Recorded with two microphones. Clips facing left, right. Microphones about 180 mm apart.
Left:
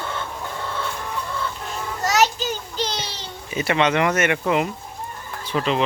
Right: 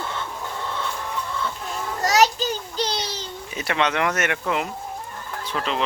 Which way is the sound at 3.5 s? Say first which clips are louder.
Left 4 dB; centre (ahead or behind).